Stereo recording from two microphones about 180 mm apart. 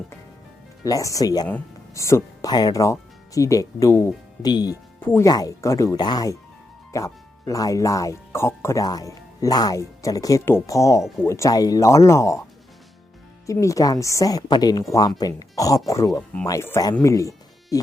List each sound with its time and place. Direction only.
0.9 s speech: 20° left (ahead or behind)
13.5 s speech: 15° left (ahead or behind)